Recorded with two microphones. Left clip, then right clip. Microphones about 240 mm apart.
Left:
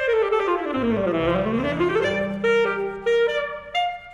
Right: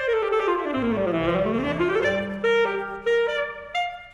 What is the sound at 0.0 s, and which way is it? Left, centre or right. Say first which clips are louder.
Saxophone: left 2 dB; left.